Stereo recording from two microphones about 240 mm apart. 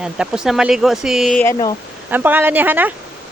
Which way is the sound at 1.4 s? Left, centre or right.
Centre.